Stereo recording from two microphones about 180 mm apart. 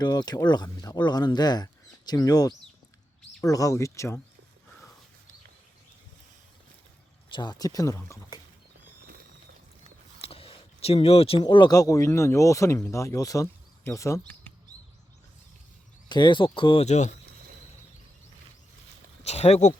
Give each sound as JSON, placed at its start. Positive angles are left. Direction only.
{"t": 0.0, "sound": "speech", "side_deg": 20}
{"t": 7.3, "sound": "speech", "side_deg": 20}
{"t": 10.2, "sound": "speech", "side_deg": 30}
{"t": 16.0, "sound": "speech", "side_deg": 25}
{"t": 19.2, "sound": "speech", "side_deg": 35}